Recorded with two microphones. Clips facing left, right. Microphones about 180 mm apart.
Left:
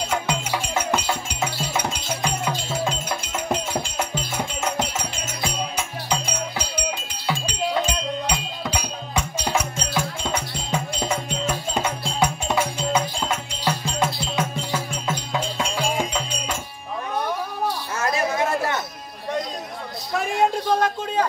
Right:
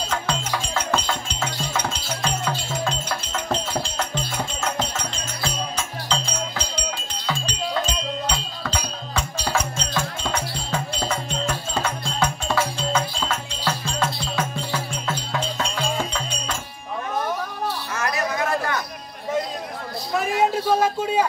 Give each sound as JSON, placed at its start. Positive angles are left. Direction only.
{"t": 0.1, "sound": "music", "side_deg": 10}
{"t": 17.9, "sound": "chatter", "side_deg": 25}
{"t": 20.1, "sound": "a sound", "side_deg": 0}